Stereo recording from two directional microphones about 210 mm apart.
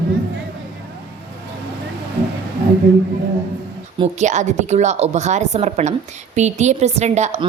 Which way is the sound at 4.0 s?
35° right (ahead or behind).